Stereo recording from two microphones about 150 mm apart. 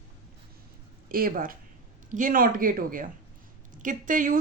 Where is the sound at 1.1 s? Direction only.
70° right (ahead or behind).